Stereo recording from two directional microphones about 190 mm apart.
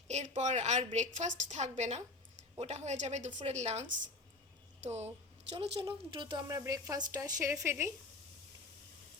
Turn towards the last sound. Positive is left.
turn(degrees=-15)  # may be behind; listen again after turning